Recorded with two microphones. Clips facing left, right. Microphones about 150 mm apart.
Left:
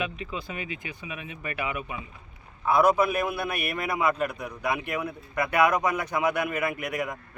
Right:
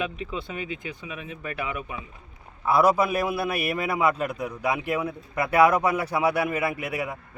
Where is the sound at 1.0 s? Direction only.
10° left (ahead or behind).